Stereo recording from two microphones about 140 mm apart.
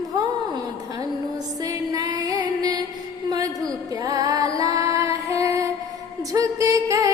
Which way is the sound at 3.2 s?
25° right (ahead or behind).